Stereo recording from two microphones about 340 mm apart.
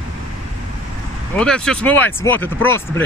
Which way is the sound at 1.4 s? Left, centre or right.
Centre.